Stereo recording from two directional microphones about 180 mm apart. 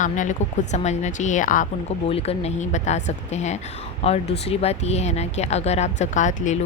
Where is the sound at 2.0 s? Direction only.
35° left (ahead or behind).